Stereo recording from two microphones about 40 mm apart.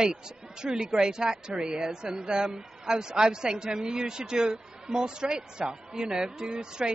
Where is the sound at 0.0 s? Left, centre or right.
Centre.